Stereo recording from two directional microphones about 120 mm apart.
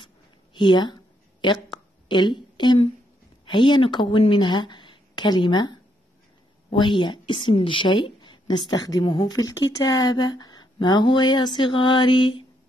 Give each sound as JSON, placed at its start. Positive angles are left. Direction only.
{"t": 0.6, "sound": "a woman's voice", "side_deg": 40}
{"t": 1.4, "sound": "a sound", "side_deg": 40}
{"t": 3.4, "sound": "a woman's voice", "side_deg": 40}